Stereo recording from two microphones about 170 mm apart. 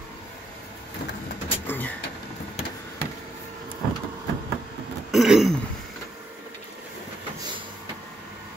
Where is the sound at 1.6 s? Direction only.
10° left (ahead or behind).